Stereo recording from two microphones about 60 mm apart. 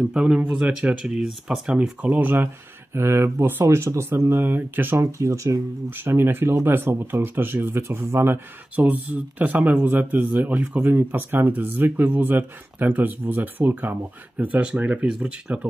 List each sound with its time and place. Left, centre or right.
0.1 s speech: centre
1.8 s speech: right
4.5 s speech: right
5.2 s speech: right
5.9 s speech: right
8.7 s speech: right